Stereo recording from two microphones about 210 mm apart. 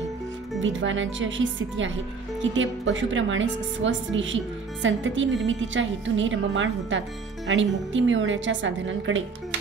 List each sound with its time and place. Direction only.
0.6 s a woman's voice: 65° right (ahead or behind)